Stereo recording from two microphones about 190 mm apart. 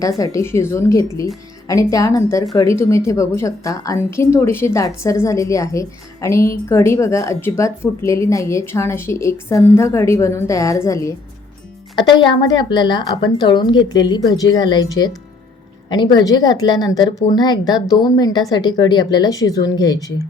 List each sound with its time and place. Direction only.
0.2 s a woman's voice: 15° left (ahead or behind)